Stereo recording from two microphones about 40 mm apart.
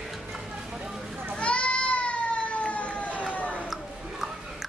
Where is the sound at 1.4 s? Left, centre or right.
Left.